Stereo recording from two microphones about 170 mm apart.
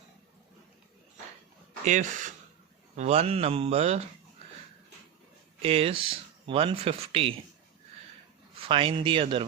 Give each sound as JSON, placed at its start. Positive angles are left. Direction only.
{"t": 1.8, "sound": "speech", "side_deg": -45}
{"t": 5.6, "sound": "speech", "side_deg": -35}
{"t": 8.6, "sound": "speech", "side_deg": -30}